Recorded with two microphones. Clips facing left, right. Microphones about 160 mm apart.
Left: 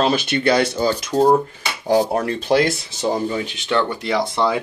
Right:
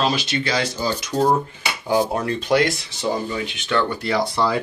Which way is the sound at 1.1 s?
40° left (ahead or behind).